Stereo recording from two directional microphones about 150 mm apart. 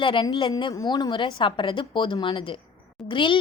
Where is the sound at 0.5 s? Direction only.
25° left (ahead or behind).